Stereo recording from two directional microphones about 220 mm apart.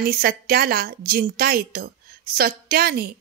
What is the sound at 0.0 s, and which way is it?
Speech, 40° right (ahead or behind).